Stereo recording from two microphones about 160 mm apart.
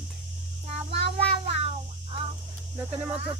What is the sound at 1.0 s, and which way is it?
Child singing, 35° right (ahead or behind).